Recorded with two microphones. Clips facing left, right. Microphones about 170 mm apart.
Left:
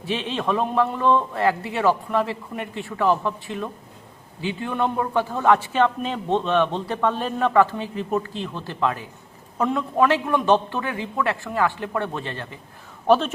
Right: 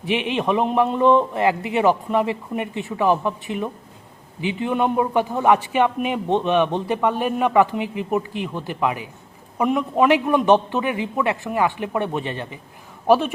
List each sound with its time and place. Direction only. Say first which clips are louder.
0.0 s a man's voice: right 4 dB; 15° right (ahead or behind)